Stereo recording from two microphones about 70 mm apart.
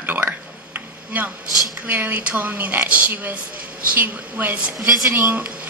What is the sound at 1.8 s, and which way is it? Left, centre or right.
A man's voice, right.